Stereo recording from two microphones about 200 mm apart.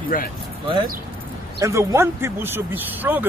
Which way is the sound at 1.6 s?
15° right (ahead or behind).